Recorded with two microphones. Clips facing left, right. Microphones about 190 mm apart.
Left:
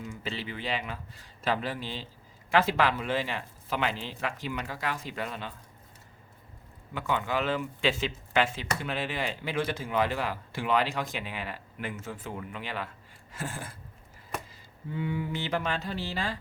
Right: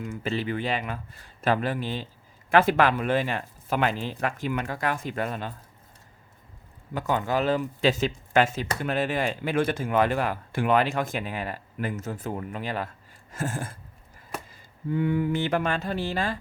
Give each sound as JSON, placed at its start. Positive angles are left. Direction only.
{"t": 0.0, "sound": "speech", "side_deg": -50}
{"t": 6.9, "sound": "speech", "side_deg": -40}